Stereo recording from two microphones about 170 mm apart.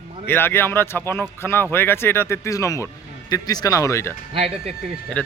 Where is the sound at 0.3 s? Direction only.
10° left (ahead or behind).